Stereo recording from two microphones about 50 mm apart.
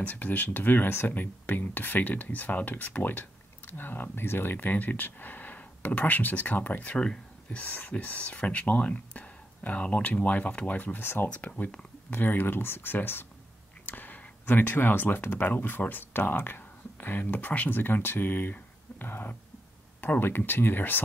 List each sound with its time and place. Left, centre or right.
0.0 s speech: left
11.0 s speech: left
11.2 s speech: left
12.1 s speech: left